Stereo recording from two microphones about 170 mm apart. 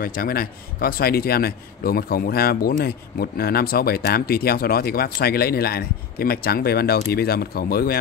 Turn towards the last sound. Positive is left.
turn(degrees=60)  # may be behind; listen again after turning